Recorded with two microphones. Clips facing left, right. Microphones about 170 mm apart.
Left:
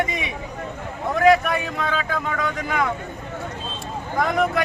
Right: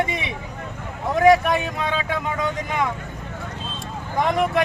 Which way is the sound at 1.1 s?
20° right (ahead or behind).